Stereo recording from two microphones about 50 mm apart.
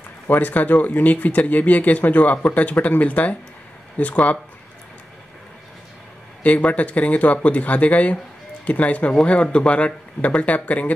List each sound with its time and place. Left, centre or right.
0.3 s speech: left
6.4 s speech: left